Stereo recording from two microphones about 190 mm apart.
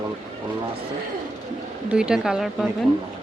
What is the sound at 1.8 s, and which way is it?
Speech, 5° right (ahead or behind).